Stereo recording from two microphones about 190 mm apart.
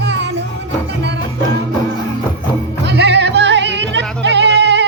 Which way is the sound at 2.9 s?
65° right (ahead or behind).